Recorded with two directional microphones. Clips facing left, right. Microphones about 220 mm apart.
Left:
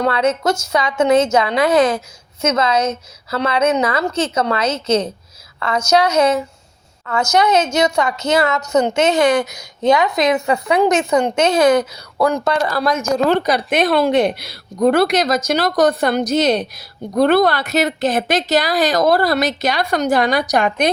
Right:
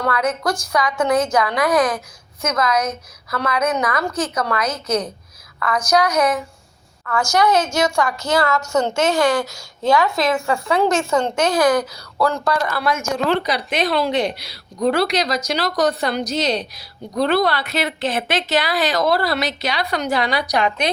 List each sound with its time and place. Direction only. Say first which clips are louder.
0.0 s a woman's voice: left 4 dB; 25° left (ahead or behind)
12.7 s a woman's voice: left 4 dB; 40° left (ahead or behind)